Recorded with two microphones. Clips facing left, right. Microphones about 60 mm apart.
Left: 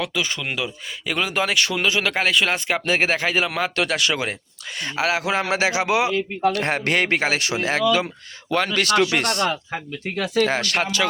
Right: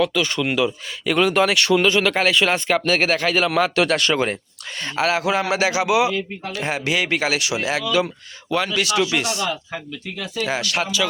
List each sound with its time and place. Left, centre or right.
0.0 s speech: centre
2.7 s a man's voice: left
3.5 s speech: centre
4.8 s a man's voice: centre
6.5 s speech: left
7.2 s speech: left
10.0 s speech: left